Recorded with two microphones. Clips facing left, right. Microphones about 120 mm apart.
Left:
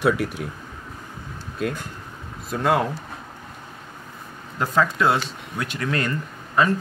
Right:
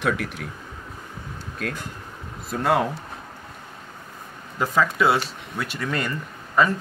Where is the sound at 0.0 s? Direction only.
5° left (ahead or behind).